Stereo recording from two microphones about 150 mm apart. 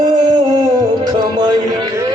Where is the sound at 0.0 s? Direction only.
30° right (ahead or behind).